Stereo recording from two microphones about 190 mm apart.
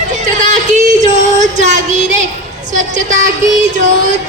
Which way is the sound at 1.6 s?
40° right (ahead or behind).